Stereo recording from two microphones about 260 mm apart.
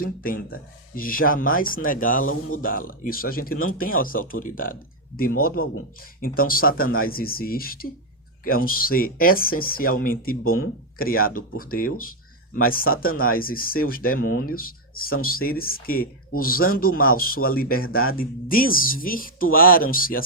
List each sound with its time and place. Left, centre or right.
0.0 s speech: left